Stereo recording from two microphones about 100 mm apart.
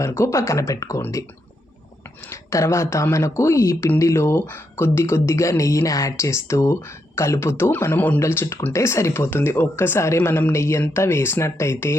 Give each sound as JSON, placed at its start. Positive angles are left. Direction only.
{"t": 0.0, "sound": "speech", "side_deg": 25}
{"t": 2.3, "sound": "speech", "side_deg": 30}